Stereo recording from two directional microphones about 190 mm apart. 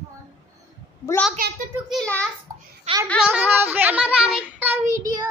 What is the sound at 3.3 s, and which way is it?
Child singing, 10° right (ahead or behind).